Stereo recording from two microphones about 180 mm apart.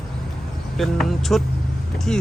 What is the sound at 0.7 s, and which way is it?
Speech, centre (ahead or behind).